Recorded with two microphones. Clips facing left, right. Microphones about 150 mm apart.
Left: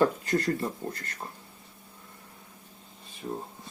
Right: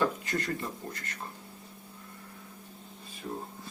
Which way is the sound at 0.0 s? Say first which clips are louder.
Left 5 dB; 35° left (ahead or behind).